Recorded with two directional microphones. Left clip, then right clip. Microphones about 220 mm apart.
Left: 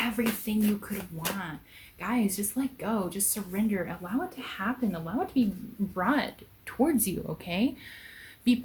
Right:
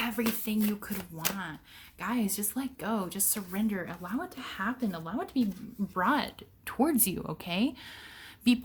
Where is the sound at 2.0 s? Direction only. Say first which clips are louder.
Left 3 dB; 45° right (ahead or behind).